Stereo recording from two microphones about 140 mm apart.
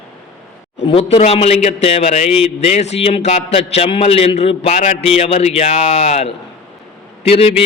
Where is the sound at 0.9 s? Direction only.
45° left (ahead or behind).